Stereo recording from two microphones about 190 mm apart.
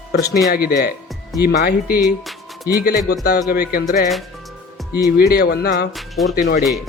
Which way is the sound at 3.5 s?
50° left (ahead or behind).